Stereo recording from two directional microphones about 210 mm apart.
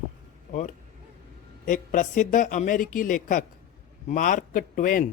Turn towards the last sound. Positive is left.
turn(degrees=40)  # may be behind; listen again after turning